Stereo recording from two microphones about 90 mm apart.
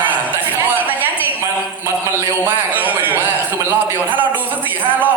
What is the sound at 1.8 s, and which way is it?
Mantra, 30° right (ahead or behind).